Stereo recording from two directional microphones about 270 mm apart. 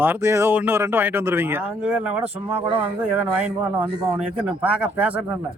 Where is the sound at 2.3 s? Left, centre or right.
Right.